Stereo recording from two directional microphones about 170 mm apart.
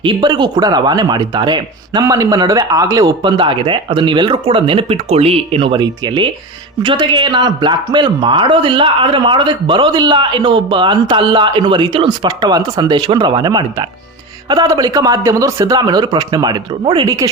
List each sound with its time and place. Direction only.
0.0 s a man's voice: 25° right (ahead or behind)
3.3 s a man's voice: 30° right (ahead or behind)